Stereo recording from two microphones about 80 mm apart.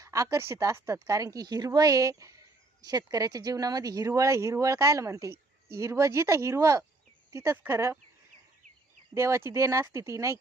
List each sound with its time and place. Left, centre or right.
0.0 s speech: right
2.8 s speech: right
7.5 s speech: right
9.1 s speech: right